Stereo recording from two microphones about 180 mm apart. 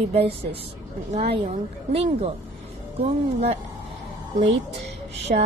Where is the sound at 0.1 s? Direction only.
30° right (ahead or behind).